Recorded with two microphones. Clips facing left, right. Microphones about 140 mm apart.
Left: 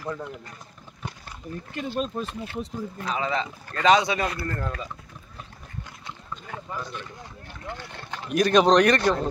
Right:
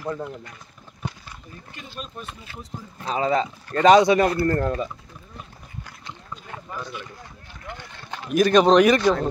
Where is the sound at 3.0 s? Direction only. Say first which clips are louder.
Right 6 dB; 35° right (ahead or behind).